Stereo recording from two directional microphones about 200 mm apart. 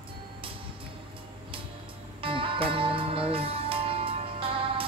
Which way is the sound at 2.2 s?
25° right (ahead or behind).